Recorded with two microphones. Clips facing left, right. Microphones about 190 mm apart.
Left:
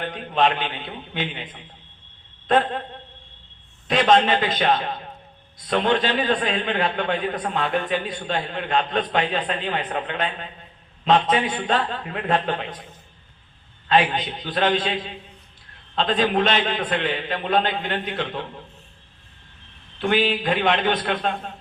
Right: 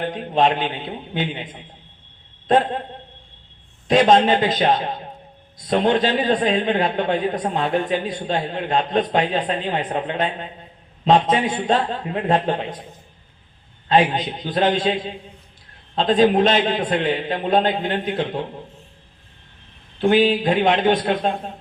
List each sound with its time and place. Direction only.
0.0 s a man's voice: 30° right (ahead or behind)
3.8 s a man's voice: 35° right (ahead or behind)
13.8 s a man's voice: 30° right (ahead or behind)
16.0 s a man's voice: 35° right (ahead or behind)
20.0 s a man's voice: 35° right (ahead or behind)